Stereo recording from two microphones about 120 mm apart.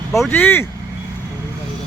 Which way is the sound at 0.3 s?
15° left (ahead or behind).